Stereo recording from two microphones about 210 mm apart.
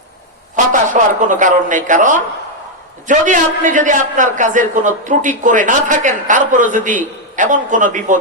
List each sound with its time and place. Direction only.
0.5 s a man's voice: 35° right (ahead or behind)